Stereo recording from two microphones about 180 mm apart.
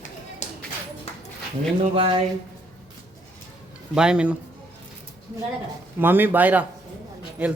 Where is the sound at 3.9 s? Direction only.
5° right (ahead or behind).